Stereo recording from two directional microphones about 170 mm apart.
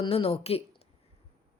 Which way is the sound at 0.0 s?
35° left (ahead or behind).